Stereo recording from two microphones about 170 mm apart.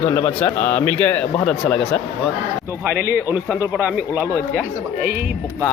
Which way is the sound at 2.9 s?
65° right (ahead or behind).